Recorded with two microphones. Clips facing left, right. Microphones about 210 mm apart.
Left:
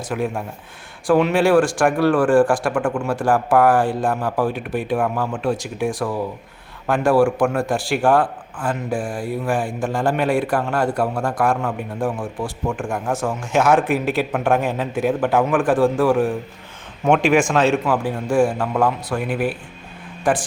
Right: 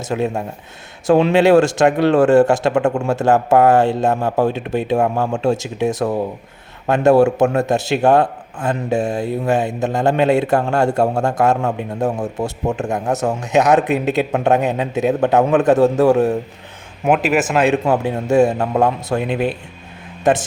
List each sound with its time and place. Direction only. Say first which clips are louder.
0.0 s speech: right 3 dB; 25° right (ahead or behind)
17.1 s a man's voice: even; 5° right (ahead or behind)
17.8 s speech: right 4 dB; 25° right (ahead or behind)